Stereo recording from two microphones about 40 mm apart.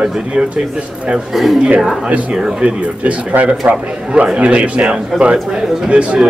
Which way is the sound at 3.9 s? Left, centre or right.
Right.